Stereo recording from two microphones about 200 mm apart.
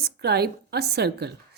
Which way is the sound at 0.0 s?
55° right (ahead or behind).